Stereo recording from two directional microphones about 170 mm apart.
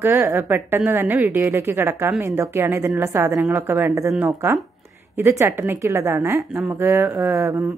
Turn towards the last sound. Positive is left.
turn(degrees=-20)  # may be behind; listen again after turning